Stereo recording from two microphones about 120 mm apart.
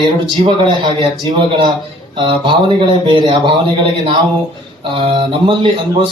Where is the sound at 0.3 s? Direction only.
40° right (ahead or behind).